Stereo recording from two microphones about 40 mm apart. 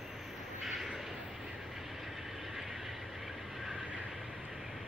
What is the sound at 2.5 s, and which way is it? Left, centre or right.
Vehicle, centre.